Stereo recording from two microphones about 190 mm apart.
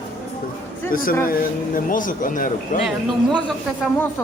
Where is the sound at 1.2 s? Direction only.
50° left (ahead or behind).